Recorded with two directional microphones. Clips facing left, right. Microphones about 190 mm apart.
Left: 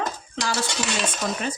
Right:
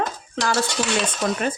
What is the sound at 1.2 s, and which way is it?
Speech, 55° right (ahead or behind).